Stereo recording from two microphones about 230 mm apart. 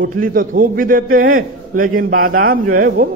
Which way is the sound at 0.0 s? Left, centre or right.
Right.